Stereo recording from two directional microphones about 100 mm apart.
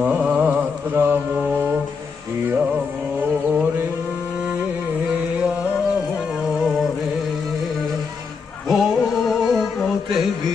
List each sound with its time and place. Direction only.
0.0 s mantra: 15° right (ahead or behind)
3.2 s a sound: 15° right (ahead or behind)
6.6 s music: 5° right (ahead or behind)
8.6 s music: centre (ahead or behind)